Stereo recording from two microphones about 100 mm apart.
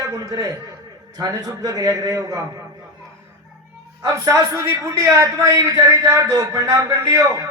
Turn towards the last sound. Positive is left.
turn(degrees=-30)  # may be behind; listen again after turning